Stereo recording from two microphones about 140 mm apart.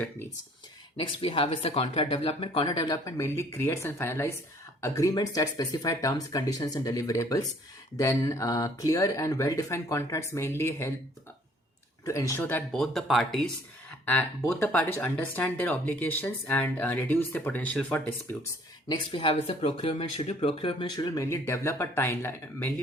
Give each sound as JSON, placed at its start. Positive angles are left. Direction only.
{"t": 0.9, "sound": "speech", "side_deg": 40}
{"t": 12.0, "sound": "speech", "side_deg": 20}
{"t": 12.7, "sound": "speech", "side_deg": 0}
{"t": 14.0, "sound": "speech", "side_deg": 15}
{"t": 18.9, "sound": "speech", "side_deg": 40}